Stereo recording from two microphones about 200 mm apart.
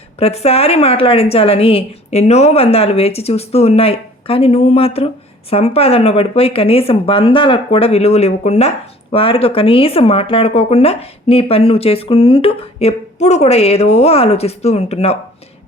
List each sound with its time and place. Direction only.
0.2 s a woman's voice: 30° left (ahead or behind)